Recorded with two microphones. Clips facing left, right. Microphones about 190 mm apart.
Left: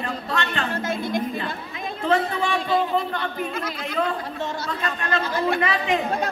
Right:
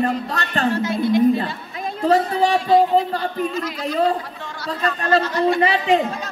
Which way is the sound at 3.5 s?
55° left (ahead or behind).